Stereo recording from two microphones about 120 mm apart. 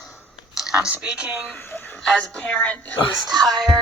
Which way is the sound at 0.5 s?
5° right (ahead or behind).